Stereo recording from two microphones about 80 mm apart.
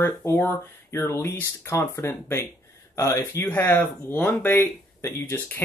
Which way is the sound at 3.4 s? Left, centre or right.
Left.